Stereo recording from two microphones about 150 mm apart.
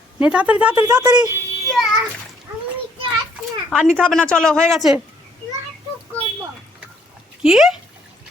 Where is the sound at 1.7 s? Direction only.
Centre (ahead or behind).